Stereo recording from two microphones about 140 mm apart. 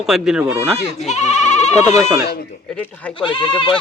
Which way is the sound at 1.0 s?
55° left (ahead or behind).